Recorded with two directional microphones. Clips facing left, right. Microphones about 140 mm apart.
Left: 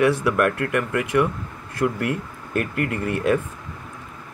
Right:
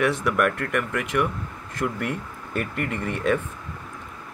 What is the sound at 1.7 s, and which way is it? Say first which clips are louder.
Speech: left 4 dB; 5° left (ahead or behind).